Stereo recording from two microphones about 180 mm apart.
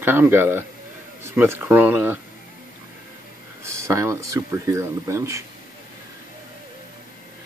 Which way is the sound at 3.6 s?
15° right (ahead or behind).